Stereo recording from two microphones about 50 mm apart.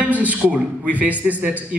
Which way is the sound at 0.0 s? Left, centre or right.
Right.